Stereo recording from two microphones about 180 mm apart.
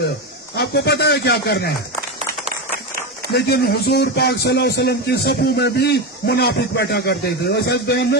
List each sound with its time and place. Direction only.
0.5 s a man's voice: 65° left (ahead or behind)
3.3 s a man's voice: 60° left (ahead or behind)